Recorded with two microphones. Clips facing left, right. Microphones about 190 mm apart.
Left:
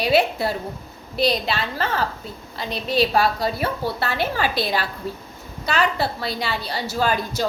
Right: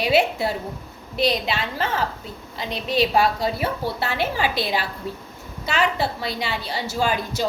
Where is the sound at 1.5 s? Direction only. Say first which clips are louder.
Even; 20° right (ahead or behind).